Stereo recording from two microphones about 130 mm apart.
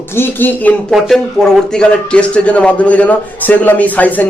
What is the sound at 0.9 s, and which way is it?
Speech, centre (ahead or behind).